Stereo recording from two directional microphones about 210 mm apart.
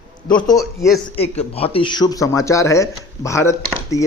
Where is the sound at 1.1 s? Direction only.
30° left (ahead or behind); by 4.0 s 15° left (ahead or behind).